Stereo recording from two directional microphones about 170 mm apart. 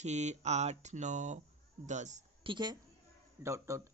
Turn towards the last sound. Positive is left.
turn(degrees=-15)  # may be behind; listen again after turning